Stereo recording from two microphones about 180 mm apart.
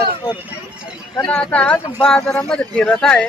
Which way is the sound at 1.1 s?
15° left (ahead or behind).